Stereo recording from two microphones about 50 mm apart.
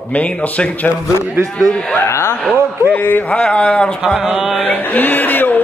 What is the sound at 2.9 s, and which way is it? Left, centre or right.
Speech, left.